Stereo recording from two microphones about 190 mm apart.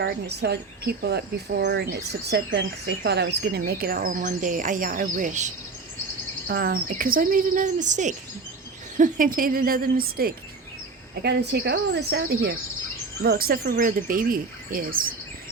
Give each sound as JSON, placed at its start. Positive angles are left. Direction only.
{"t": 0.0, "sound": "speech", "side_deg": -60}
{"t": 6.5, "sound": "speech", "side_deg": -50}
{"t": 11.1, "sound": "speech", "side_deg": -60}